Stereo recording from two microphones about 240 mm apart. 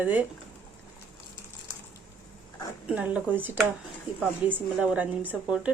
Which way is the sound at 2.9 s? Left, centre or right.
Centre.